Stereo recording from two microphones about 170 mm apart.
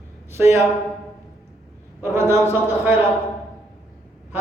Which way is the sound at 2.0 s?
15° right (ahead or behind).